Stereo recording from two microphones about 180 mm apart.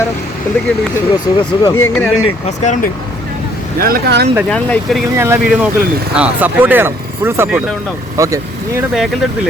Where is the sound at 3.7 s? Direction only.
55° right (ahead or behind).